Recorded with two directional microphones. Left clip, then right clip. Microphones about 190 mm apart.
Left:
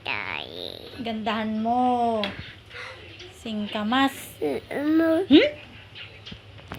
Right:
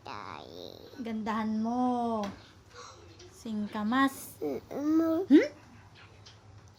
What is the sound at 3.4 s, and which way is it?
A woman's voice, 30° right (ahead or behind).